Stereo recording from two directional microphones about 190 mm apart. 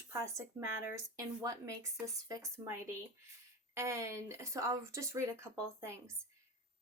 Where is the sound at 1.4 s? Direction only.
15° right (ahead or behind).